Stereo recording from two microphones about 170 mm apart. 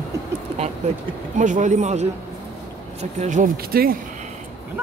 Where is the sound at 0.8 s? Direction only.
40° right (ahead or behind); by 4.0 s 60° right (ahead or behind).